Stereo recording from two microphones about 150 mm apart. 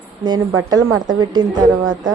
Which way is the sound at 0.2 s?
30° right (ahead or behind).